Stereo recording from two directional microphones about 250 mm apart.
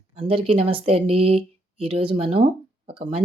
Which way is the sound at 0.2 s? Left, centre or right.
Right.